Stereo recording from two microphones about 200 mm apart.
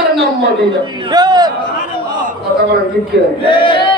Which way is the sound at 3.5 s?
25° left (ahead or behind).